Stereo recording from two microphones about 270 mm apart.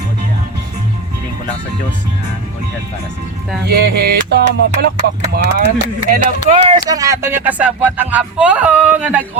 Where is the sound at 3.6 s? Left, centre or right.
Right.